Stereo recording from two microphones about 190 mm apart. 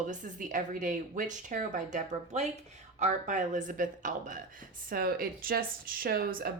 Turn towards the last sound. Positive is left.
turn(degrees=-50)  # may be behind; listen again after turning